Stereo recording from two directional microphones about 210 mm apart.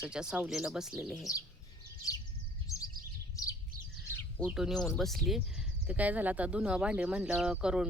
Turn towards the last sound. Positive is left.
turn(degrees=-5)  # may be behind; listen again after turning